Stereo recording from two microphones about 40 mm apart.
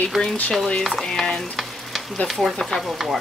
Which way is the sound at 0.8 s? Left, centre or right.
Centre.